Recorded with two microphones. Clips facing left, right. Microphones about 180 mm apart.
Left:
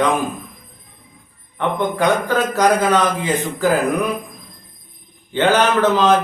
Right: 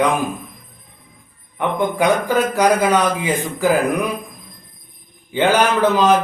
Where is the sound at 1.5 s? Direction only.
10° right (ahead or behind).